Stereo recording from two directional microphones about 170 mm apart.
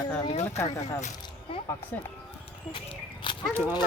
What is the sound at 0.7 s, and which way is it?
Speech, 40° left (ahead or behind).